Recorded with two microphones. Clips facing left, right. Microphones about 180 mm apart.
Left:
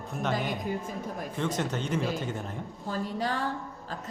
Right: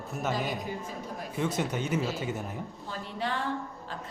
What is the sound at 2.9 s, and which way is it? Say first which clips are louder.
Speech: left 4 dB; 40° left (ahead or behind).